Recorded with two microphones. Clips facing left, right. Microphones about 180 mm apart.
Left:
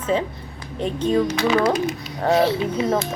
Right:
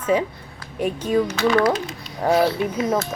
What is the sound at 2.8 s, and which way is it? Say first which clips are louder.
Speech: even; 5° right (ahead or behind).